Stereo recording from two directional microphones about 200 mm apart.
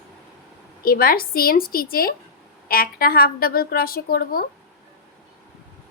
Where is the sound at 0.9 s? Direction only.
45° left (ahead or behind).